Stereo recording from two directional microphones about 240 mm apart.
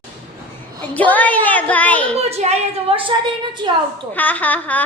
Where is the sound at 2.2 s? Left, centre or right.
Right.